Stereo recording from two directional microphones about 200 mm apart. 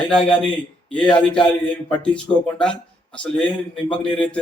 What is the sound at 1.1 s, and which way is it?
Speech, 25° left (ahead or behind).